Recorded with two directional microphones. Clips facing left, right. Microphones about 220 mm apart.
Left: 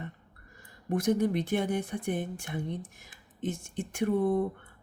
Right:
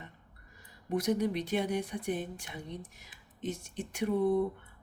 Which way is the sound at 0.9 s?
50° left (ahead or behind).